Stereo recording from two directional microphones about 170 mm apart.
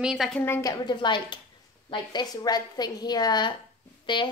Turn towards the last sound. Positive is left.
turn(degrees=30)  # may be behind; listen again after turning